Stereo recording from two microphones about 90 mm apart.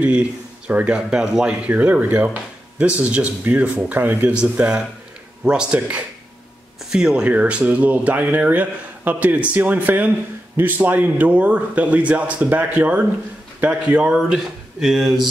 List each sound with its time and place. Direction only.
0.0 s speech: 15° right (ahead or behind)
1.7 s speech: 20° right (ahead or behind); by 15.2 s 5° right (ahead or behind)